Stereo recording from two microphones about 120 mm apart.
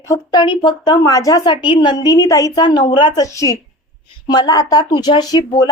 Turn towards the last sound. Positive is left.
turn(degrees=35)  # may be behind; listen again after turning